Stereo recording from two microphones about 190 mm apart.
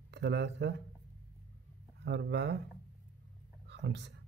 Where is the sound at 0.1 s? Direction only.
65° right (ahead or behind).